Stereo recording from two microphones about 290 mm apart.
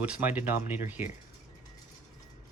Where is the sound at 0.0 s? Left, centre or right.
Centre.